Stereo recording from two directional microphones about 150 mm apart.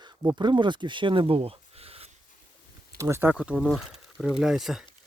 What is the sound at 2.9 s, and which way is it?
Speech, 20° right (ahead or behind).